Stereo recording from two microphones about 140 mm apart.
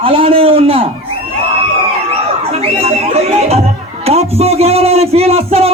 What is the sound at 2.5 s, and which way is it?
Music, 45° right (ahead or behind).